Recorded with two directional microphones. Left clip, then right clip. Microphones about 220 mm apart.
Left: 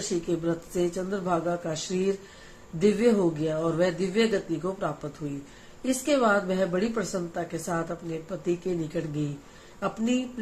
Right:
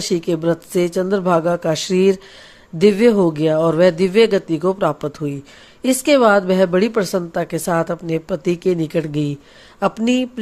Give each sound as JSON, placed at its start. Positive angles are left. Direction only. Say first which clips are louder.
{"t": 0.1, "sound": "a woman's voice", "louder": "right 10 dB", "side_deg": -50}